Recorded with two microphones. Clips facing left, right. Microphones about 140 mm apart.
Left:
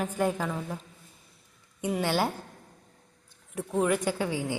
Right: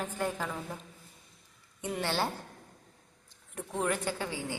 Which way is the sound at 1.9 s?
10° left (ahead or behind).